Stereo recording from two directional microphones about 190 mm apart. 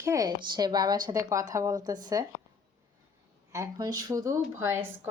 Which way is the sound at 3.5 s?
15° right (ahead or behind).